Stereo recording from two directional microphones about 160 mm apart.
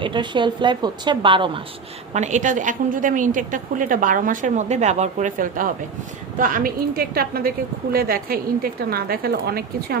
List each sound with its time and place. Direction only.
0.0 s a woman's voice: 30° right (ahead or behind)
2.1 s a woman's voice: 45° right (ahead or behind); by 10.0 s 75° right (ahead or behind)